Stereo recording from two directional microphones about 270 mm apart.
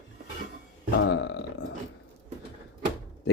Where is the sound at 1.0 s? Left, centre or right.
Left.